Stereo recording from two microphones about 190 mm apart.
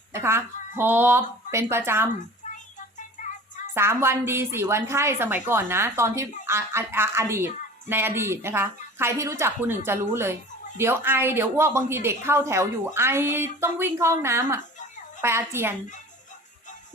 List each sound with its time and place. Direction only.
0.1 s speech: 15° right (ahead or behind)
3.2 s music: 40° left (ahead or behind)
3.8 s speech: 15° right (ahead or behind)